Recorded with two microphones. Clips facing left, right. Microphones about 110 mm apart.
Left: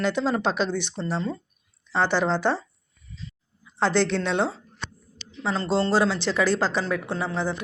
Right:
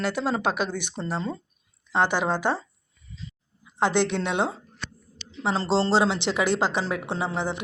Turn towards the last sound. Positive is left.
turn(degrees=-20)  # may be behind; listen again after turning